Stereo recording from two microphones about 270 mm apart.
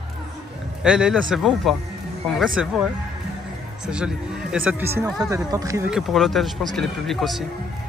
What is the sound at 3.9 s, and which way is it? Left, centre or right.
Speech, centre.